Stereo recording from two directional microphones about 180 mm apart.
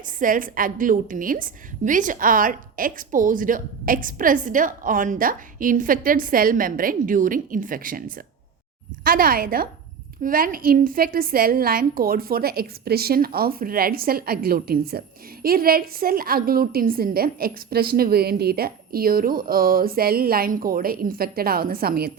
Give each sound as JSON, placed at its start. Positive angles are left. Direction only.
{"t": 0.2, "sound": "a woman's voice", "side_deg": -50}